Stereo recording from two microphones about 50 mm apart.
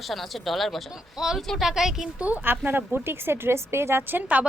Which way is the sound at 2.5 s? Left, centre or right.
Right.